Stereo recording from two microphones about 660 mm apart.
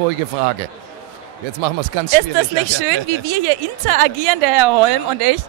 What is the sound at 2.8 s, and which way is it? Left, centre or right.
A woman's voice, right.